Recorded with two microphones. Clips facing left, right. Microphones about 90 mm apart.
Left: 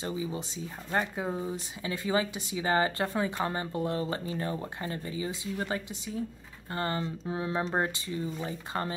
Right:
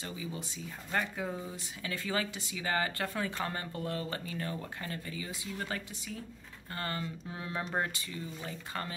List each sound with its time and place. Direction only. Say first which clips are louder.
0.0 s speech: left 7 dB; 25° left (ahead or behind)